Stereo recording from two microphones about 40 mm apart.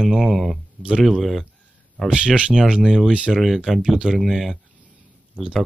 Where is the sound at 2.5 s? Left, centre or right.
Centre.